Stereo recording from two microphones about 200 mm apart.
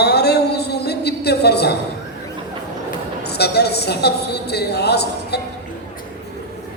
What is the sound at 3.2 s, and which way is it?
Speech, 55° left (ahead or behind).